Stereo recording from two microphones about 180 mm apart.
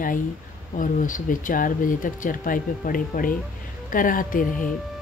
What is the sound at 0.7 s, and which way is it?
Speech, 50° left (ahead or behind).